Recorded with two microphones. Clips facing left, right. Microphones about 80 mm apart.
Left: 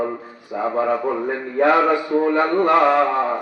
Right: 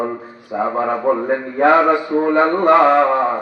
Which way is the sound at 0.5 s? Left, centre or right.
Right.